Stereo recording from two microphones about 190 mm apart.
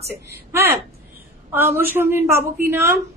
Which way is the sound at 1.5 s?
10° right (ahead or behind).